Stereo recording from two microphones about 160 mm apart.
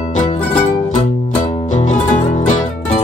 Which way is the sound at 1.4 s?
45° left (ahead or behind).